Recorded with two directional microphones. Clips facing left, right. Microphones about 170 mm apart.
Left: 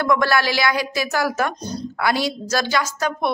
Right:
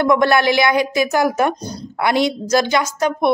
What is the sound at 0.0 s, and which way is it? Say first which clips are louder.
A woman's voice: right 5 dB; 20° right (ahead or behind).